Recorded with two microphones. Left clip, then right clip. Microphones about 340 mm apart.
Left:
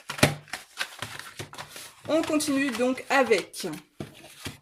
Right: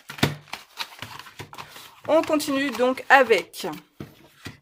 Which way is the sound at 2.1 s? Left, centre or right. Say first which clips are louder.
Right 5 dB; right.